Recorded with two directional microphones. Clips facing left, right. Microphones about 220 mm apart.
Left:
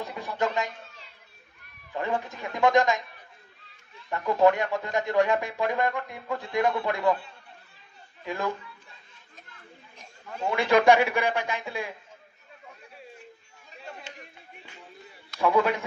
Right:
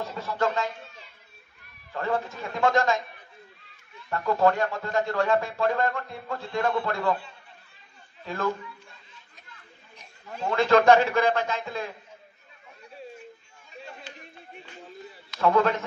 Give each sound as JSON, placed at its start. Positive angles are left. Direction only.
{"t": 0.0, "sound": "speech", "side_deg": 15}
{"t": 2.0, "sound": "speech", "side_deg": 15}
{"t": 4.1, "sound": "speech", "side_deg": 15}
{"t": 8.3, "sound": "speech", "side_deg": 15}
{"t": 10.5, "sound": "speech", "side_deg": 15}
{"t": 15.4, "sound": "speech", "side_deg": 15}